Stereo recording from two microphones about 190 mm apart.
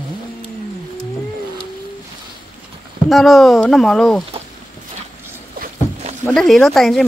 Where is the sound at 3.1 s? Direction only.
Centre (ahead or behind).